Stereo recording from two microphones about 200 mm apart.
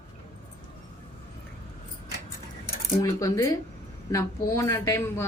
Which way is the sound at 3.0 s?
15° left (ahead or behind).